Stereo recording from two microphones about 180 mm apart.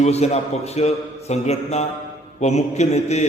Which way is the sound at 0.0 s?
35° left (ahead or behind).